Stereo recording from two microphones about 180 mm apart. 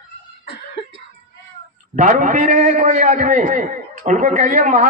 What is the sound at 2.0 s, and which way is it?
A man's voice, 45° right (ahead or behind).